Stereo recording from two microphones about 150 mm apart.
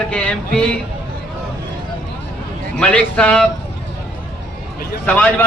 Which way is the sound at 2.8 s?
10° left (ahead or behind).